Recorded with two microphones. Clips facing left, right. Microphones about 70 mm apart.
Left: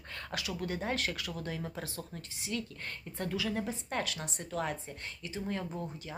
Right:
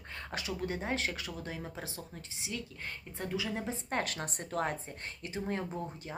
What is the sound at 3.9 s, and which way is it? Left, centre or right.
A woman's voice, right.